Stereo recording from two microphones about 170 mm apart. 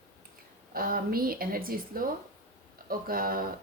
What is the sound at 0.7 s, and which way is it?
Speech, 60° right (ahead or behind).